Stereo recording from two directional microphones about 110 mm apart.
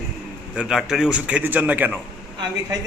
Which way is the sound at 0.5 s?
5° right (ahead or behind).